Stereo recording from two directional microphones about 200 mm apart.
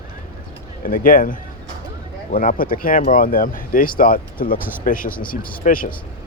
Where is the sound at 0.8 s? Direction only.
45° left (ahead or behind).